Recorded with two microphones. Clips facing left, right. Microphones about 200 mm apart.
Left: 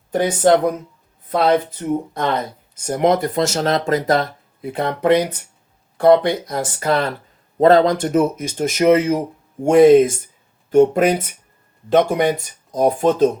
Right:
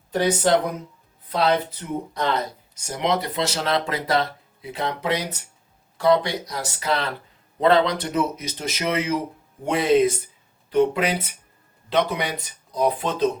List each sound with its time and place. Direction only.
0.1 s speech: 50° left (ahead or behind)